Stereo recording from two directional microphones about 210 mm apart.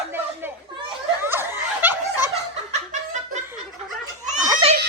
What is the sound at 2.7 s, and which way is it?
Snicker, 35° right (ahead or behind).